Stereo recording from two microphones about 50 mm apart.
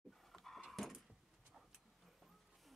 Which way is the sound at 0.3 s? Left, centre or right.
Centre.